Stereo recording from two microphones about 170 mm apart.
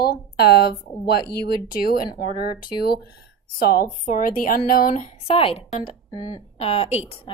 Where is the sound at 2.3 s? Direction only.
25° left (ahead or behind).